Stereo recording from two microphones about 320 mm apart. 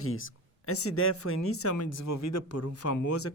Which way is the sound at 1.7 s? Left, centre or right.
Left.